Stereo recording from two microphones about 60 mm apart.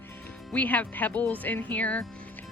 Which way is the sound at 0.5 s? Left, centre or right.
Left.